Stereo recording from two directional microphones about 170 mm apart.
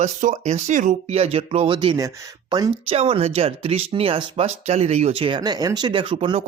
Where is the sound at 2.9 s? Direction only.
35° right (ahead or behind).